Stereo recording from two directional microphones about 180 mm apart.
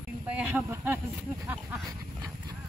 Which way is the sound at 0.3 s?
10° right (ahead or behind).